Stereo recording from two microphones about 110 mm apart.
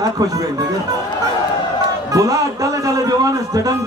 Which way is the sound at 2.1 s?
30° right (ahead or behind).